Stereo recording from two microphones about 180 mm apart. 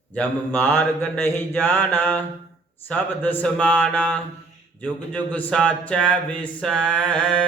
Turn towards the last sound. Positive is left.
turn(degrees=5)  # may be behind; listen again after turning